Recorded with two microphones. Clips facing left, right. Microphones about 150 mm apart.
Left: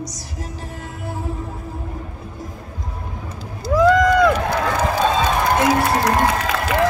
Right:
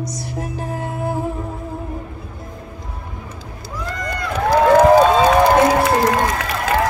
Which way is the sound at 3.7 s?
90° left.